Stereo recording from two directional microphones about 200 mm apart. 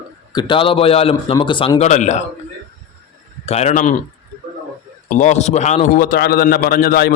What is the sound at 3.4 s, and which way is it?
Speech, 35° left (ahead or behind).